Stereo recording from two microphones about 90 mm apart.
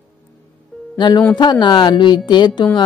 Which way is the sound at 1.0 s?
55° left (ahead or behind).